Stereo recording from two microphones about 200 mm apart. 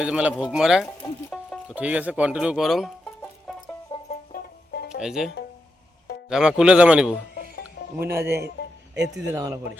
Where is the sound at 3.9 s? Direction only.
20° left (ahead or behind).